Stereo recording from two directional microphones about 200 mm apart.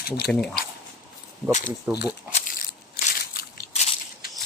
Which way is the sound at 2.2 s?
45° left (ahead or behind).